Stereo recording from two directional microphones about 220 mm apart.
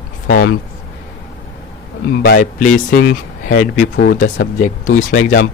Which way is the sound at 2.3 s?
35° left (ahead or behind).